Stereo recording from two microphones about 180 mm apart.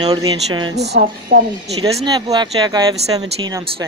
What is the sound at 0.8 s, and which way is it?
Speech, 60° right (ahead or behind).